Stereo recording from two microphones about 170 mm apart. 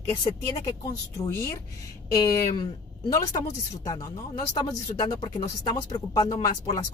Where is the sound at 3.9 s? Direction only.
20° left (ahead or behind).